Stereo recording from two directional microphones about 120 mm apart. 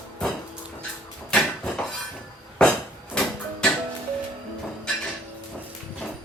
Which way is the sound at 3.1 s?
5° left (ahead or behind).